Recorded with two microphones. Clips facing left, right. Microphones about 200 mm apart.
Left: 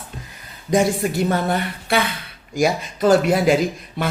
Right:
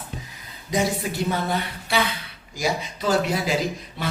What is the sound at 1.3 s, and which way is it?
A man's voice, 55° left (ahead or behind).